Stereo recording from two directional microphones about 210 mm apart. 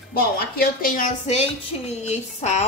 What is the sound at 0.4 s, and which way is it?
A woman's voice, 45° left (ahead or behind).